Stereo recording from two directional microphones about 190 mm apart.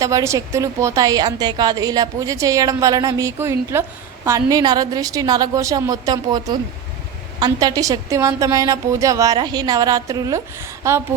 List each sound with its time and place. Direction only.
0.0 s a woman's voice: 15° right (ahead or behind)